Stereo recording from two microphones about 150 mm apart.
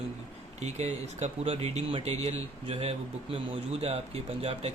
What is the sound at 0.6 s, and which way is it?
Speech, 50° right (ahead or behind).